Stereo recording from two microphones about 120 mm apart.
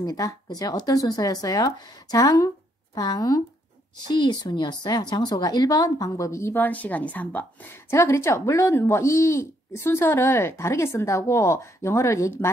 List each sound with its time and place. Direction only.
0.0 s a woman's voice: 30° left (ahead or behind)